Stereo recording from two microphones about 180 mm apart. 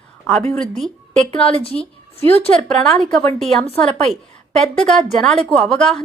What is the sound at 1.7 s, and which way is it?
Speech, 30° right (ahead or behind).